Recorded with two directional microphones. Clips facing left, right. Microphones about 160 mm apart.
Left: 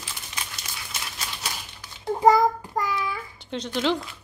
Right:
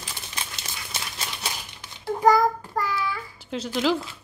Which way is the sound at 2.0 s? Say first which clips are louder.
Left 1 dB; 25° left (ahead or behind).